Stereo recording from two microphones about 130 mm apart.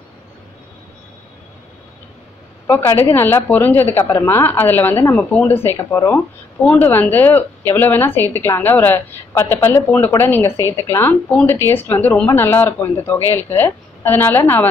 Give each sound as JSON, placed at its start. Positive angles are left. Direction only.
{"t": 2.6, "sound": "a woman's voice", "side_deg": 15}